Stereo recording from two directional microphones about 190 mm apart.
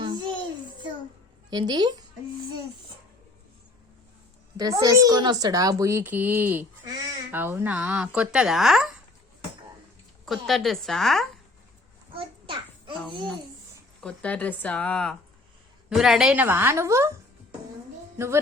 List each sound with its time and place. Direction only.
1.5 s a woman's voice: 20° right (ahead or behind)
4.5 s a child's voice: 20° right (ahead or behind); by 8.9 s centre (ahead or behind)
10.2 s a woman's voice: centre (ahead or behind)
12.1 s a sound: 25° right (ahead or behind)
14.0 s a child's voice: 5° left (ahead or behind); by 17.1 s 15° right (ahead or behind)